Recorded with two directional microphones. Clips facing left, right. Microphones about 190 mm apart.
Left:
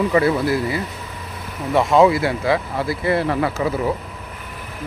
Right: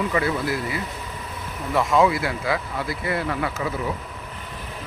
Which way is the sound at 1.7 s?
30° left (ahead or behind).